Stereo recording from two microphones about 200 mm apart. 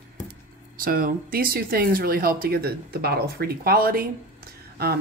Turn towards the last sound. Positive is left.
turn(degrees=-50)  # may be behind; listen again after turning